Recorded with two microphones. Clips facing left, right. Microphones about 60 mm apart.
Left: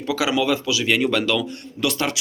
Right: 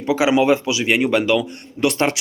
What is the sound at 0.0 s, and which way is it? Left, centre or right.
Speech, right.